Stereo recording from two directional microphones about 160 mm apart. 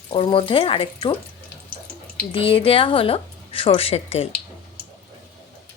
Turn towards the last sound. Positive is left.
turn(degrees=40)  # may be behind; listen again after turning